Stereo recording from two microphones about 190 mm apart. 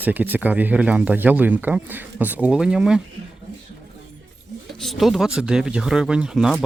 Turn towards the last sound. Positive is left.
turn(degrees=0)  # may be behind; listen again after turning